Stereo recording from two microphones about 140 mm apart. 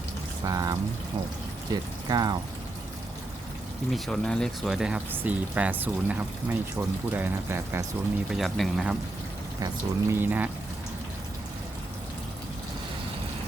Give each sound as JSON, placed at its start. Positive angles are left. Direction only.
{"t": 0.4, "sound": "speech", "side_deg": -25}
{"t": 3.9, "sound": "speech", "side_deg": 5}
{"t": 8.3, "sound": "speech", "side_deg": 0}
{"t": 9.6, "sound": "speech", "side_deg": -25}
{"t": 10.2, "sound": "speech", "side_deg": -15}